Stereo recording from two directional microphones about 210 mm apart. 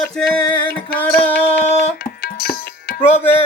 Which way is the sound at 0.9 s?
10° left (ahead or behind).